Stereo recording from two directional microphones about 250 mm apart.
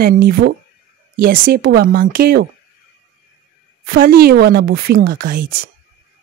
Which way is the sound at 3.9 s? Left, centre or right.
Right.